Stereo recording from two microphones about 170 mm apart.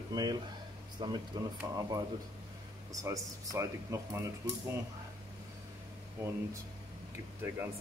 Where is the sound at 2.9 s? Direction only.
20° right (ahead or behind).